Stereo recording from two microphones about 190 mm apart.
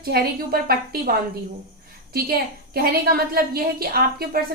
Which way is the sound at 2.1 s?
55° right (ahead or behind).